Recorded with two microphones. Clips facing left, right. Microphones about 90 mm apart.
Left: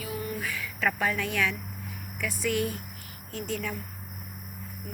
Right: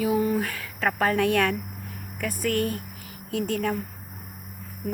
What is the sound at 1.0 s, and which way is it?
Speech, 65° right (ahead or behind).